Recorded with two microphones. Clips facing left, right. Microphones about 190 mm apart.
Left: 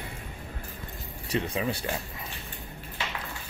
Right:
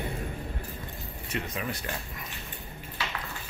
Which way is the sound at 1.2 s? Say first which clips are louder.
Left 5 dB; 30° left (ahead or behind).